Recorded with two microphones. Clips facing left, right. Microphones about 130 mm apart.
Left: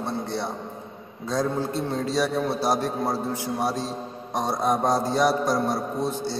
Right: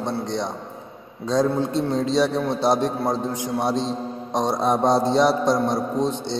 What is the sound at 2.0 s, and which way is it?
A man's voice, 25° right (ahead or behind).